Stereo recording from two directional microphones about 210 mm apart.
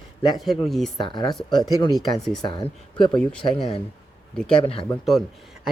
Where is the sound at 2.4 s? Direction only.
20° left (ahead or behind).